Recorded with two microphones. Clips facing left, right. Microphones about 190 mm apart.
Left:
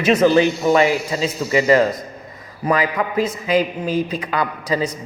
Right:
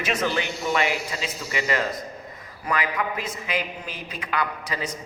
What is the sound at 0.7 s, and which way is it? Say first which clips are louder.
Speech: left 9 dB; 35° left (ahead or behind).